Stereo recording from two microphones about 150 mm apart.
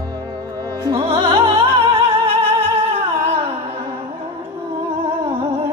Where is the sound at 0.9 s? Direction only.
40° right (ahead or behind).